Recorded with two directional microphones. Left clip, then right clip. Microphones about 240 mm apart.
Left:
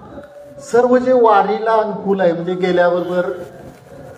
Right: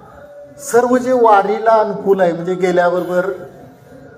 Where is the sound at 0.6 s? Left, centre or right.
Right.